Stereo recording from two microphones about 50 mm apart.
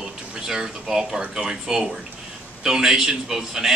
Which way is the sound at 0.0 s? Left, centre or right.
Centre.